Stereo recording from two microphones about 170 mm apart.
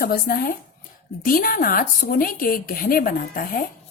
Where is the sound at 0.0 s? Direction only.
60° left (ahead or behind).